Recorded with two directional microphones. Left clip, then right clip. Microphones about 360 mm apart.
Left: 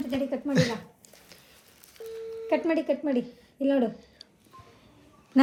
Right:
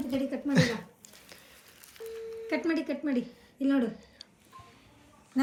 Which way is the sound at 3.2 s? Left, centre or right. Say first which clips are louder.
Left 4 dB; centre.